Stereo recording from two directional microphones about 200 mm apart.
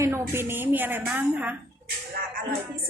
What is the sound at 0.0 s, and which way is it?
A woman's voice, 10° right (ahead or behind).